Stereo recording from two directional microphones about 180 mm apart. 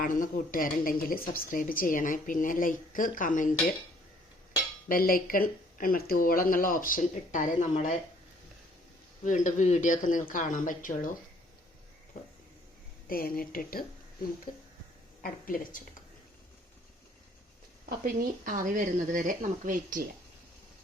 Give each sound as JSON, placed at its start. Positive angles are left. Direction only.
{"t": 0.0, "sound": "a woman's voice", "side_deg": 50}
{"t": 4.9, "sound": "a woman's voice", "side_deg": 55}
{"t": 9.2, "sound": "a woman's voice", "side_deg": 45}
{"t": 13.1, "sound": "a woman's voice", "side_deg": 55}
{"t": 15.2, "sound": "a woman's voice", "side_deg": 50}
{"t": 17.8, "sound": "speech", "side_deg": -50}